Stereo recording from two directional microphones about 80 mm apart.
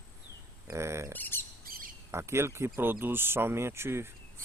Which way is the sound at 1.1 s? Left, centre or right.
Left.